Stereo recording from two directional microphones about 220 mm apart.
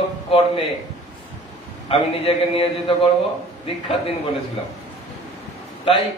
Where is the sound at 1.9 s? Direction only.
25° left (ahead or behind).